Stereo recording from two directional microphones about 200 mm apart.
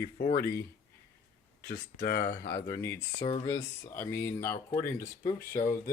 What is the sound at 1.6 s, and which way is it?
Speech, 45° left (ahead or behind).